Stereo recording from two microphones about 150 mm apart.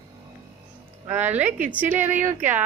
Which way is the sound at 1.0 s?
10° right (ahead or behind).